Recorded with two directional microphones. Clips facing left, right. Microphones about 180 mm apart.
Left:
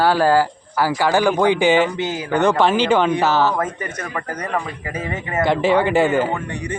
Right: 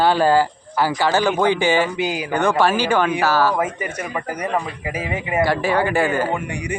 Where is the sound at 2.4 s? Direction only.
20° left (ahead or behind).